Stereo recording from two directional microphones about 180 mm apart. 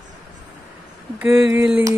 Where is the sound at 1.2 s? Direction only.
15° right (ahead or behind).